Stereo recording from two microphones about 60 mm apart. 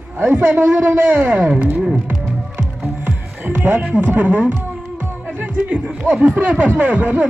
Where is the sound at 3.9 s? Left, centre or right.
Right.